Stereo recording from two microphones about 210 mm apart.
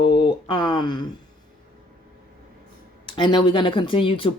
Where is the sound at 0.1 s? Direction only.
25° left (ahead or behind).